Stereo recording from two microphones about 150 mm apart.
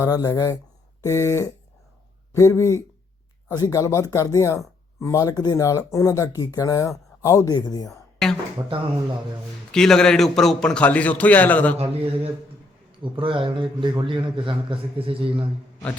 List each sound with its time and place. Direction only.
0.0 s speech: 25° left (ahead or behind)
8.2 s speech: 5° left (ahead or behind)
9.7 s a man's voice: 5° left (ahead or behind)
11.8 s a man's voice: 40° right (ahead or behind)